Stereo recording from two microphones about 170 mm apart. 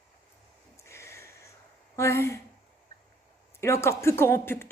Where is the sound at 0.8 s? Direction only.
15° left (ahead or behind).